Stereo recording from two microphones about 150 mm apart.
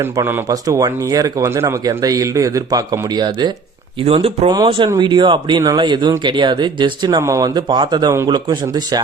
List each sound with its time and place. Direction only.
0.0 s speech: 15° right (ahead or behind)
4.0 s speech: 40° right (ahead or behind)